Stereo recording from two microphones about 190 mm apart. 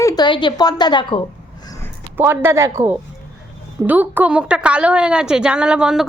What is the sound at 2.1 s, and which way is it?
A woman's voice, 10° right (ahead or behind).